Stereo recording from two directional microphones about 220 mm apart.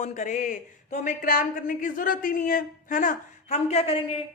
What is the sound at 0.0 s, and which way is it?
A woman's voice, 35° left (ahead or behind).